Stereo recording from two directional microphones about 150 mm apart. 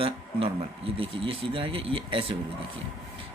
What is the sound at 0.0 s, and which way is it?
A man's voice, 40° right (ahead or behind).